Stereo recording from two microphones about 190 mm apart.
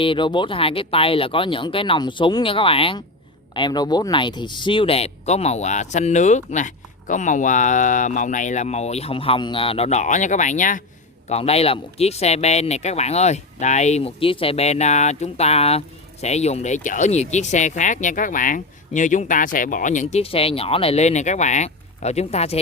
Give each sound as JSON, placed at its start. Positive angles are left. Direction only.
{"t": 0.0, "sound": "speech", "side_deg": 25}
{"t": 11.3, "sound": "speech", "side_deg": 35}